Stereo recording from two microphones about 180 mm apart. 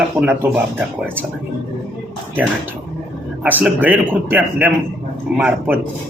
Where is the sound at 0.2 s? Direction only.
10° right (ahead or behind).